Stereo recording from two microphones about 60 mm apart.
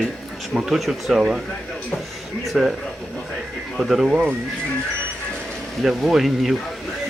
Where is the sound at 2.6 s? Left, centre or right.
Centre.